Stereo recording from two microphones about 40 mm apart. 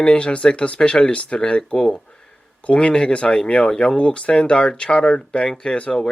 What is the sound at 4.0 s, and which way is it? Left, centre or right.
Speech, left.